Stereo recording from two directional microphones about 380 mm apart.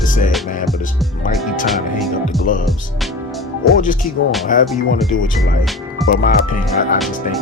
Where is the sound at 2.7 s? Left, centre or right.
Centre.